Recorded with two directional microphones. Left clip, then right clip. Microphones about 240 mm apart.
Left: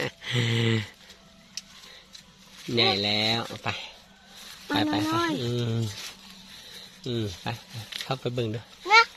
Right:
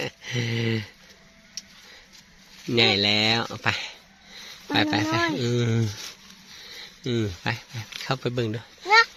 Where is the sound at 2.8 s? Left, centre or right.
Right.